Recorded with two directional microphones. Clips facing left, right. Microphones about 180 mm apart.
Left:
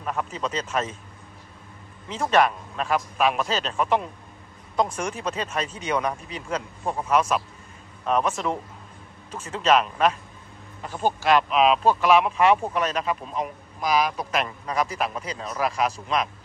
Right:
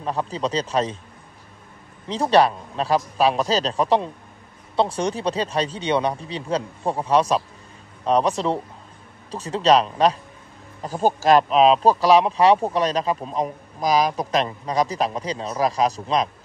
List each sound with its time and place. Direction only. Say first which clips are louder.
0.0 s speech: right 4 dB; 35° right (ahead or behind)
2.0 s speech: right 4 dB; 35° right (ahead or behind)